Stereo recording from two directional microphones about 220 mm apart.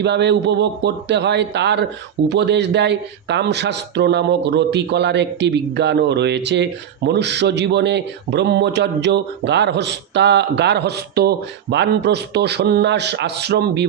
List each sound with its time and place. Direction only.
0.0 s speech: 50° right (ahead or behind)